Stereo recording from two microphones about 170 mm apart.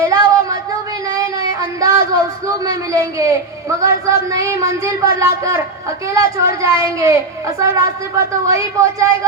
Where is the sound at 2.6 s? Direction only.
20° right (ahead or behind).